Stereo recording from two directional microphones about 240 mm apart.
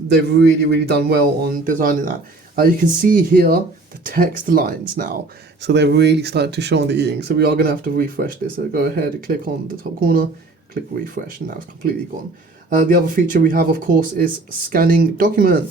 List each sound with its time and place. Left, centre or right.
0.1 s a man's voice: right
12.7 s a man's voice: right